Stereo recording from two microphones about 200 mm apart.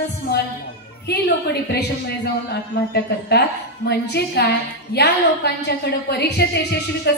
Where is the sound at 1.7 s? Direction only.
55° left (ahead or behind).